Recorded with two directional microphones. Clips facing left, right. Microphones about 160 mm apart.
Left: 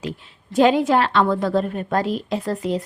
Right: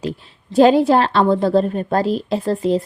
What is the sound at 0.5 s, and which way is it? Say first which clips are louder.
A woman's voice: right 4 dB; 35° right (ahead or behind).